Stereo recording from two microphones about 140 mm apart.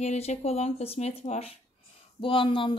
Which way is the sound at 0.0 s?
55° left (ahead or behind).